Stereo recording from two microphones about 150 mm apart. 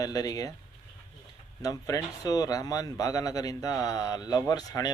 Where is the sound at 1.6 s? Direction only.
25° left (ahead or behind).